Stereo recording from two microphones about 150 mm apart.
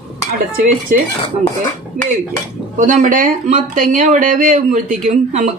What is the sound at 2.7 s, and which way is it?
Speech, 60° right (ahead or behind).